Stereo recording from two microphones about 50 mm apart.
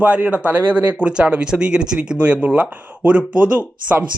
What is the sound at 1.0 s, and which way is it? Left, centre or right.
Speech, right.